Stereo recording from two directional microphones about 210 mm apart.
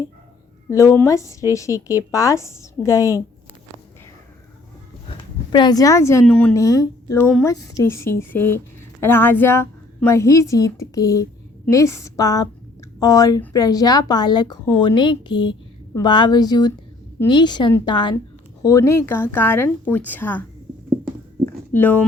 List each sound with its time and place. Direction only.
0.7 s a woman's voice: 15° left (ahead or behind)
5.5 s a woman's voice: 20° left (ahead or behind)
21.4 s a sound: 10° left (ahead or behind)